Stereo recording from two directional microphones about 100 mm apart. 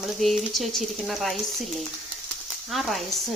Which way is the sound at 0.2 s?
Centre (ahead or behind).